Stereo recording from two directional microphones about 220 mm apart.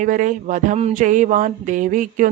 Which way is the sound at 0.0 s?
35° right (ahead or behind).